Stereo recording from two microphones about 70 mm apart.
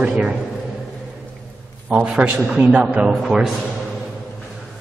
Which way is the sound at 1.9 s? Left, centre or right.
Centre.